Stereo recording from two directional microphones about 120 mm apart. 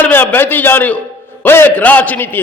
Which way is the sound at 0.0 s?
15° left (ahead or behind).